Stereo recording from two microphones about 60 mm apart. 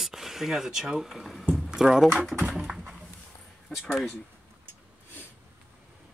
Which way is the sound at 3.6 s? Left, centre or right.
Centre.